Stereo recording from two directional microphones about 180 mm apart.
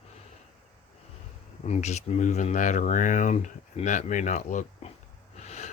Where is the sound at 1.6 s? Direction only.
40° left (ahead or behind).